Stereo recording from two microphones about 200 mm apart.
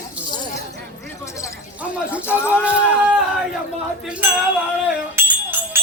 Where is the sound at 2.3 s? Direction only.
10° left (ahead or behind).